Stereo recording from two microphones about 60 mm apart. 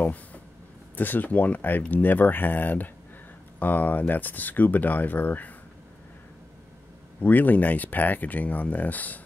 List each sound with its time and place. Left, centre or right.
0.0 s a sound: left
0.9 s speech: left
7.2 s speech: left